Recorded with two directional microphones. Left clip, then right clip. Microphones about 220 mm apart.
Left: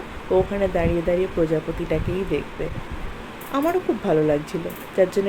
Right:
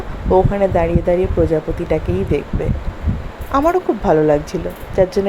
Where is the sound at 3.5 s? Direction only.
10° right (ahead or behind).